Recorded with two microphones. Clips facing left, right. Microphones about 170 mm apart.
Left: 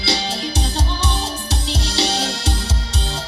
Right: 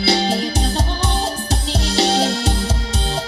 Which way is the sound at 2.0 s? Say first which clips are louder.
Right 6 dB; 50° right (ahead or behind).